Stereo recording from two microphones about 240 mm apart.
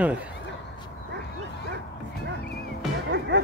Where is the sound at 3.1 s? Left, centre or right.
Right.